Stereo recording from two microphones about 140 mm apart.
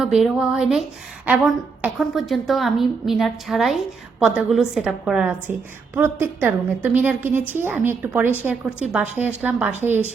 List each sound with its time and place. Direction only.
0.0 s a woman's voice: centre (ahead or behind)
5.5 s a woman's voice: 15° right (ahead or behind)